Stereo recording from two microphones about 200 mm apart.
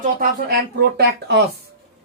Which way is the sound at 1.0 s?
55° right (ahead or behind).